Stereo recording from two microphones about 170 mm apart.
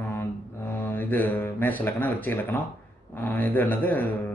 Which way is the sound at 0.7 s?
10° left (ahead or behind).